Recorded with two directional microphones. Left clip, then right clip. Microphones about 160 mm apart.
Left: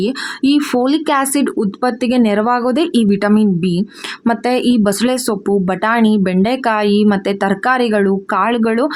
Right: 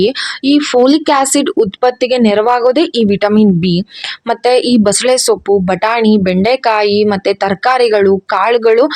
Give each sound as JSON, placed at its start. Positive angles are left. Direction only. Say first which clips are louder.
{"t": 0.0, "sound": "speech", "louder": "right 4 dB", "side_deg": -35}